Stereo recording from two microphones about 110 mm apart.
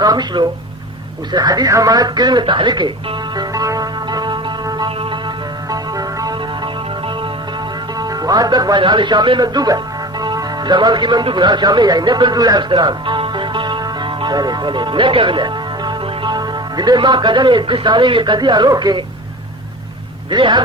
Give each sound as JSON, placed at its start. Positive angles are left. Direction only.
{"t": 0.0, "sound": "speech", "side_deg": -40}
{"t": 3.5, "sound": "music", "side_deg": -35}
{"t": 7.9, "sound": "a man's voice", "side_deg": -35}
{"t": 20.3, "sound": "a man's voice", "side_deg": -45}